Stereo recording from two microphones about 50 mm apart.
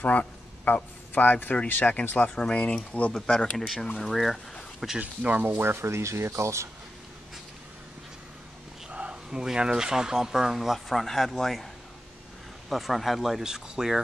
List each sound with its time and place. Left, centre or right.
0.0 s a man's voice: left
2.3 s speech: centre
3.3 s speech: centre
4.9 s speech: right
5.4 s speech: right
8.9 s a sound: right
9.3 s speech: centre
12.6 s speech: centre